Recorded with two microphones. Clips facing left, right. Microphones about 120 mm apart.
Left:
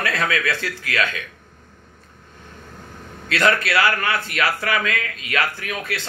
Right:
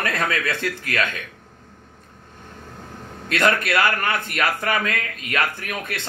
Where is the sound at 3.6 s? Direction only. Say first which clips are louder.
Left 1 dB; 50° right (ahead or behind).